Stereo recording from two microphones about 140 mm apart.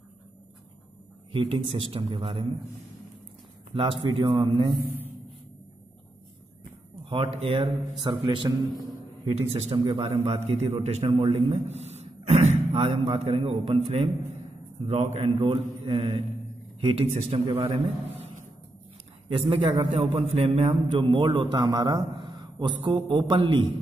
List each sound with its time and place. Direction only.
1.3 s a man's voice: 40° right (ahead or behind)
4.1 s a man's voice: 40° right (ahead or behind)
7.1 s a man's voice: 45° right (ahead or behind)
8.0 s a man's voice: 30° right (ahead or behind)
9.2 s a man's voice: 45° right (ahead or behind)